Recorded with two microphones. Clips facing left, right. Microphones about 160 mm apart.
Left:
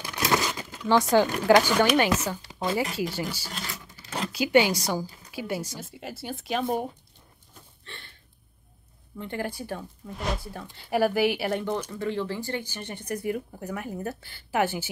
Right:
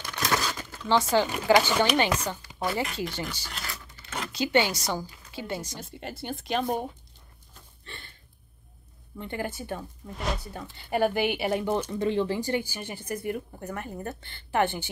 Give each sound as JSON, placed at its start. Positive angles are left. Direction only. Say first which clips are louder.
{"t": 0.0, "sound": "crumpling", "louder": "left 3 dB", "side_deg": 10}
{"t": 1.2, "sound": "speech", "louder": "left 2 dB", "side_deg": -5}
{"t": 1.9, "sound": "speech", "louder": "left 2 dB", "side_deg": 5}
{"t": 2.4, "sound": "speech", "louder": "left 2 dB", "side_deg": 20}
{"t": 3.0, "sound": "a woman's voice", "louder": "left 3 dB", "side_deg": 10}
{"t": 3.7, "sound": "a sound", "louder": "left 2 dB", "side_deg": 10}
{"t": 4.3, "sound": "a woman's voice", "louder": "left 3 dB", "side_deg": 10}
{"t": 7.8, "sound": "a sound", "louder": "even", "side_deg": 0}
{"t": 9.2, "sound": "speech", "louder": "left 1 dB", "side_deg": 0}
{"t": 11.9, "sound": "speech", "louder": "right 3 dB", "side_deg": -20}